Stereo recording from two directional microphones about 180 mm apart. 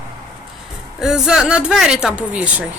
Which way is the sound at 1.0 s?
5° right (ahead or behind).